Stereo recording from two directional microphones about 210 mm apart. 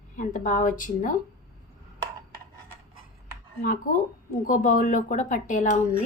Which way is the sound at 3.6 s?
40° left (ahead or behind).